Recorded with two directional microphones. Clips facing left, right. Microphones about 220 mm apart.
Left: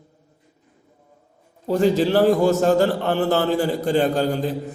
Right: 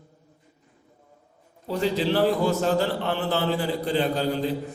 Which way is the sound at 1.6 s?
45° left (ahead or behind).